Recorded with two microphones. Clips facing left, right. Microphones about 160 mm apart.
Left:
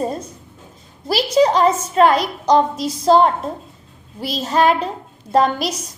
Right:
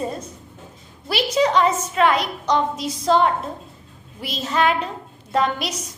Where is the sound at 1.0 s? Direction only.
35° left (ahead or behind).